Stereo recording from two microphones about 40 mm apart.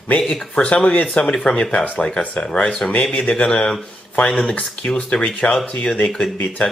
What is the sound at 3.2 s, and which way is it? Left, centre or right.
Speech, left.